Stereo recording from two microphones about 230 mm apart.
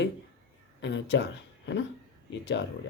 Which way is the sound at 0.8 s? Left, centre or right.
Left.